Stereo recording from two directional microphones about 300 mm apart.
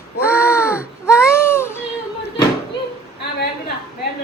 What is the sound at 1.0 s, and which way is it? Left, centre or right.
Baby cry, centre.